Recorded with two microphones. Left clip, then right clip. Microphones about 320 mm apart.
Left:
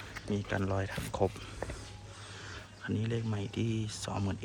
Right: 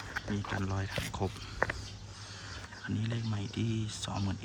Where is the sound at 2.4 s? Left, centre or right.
Centre.